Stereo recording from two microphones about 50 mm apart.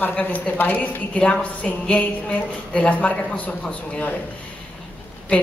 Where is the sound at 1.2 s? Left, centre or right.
Left.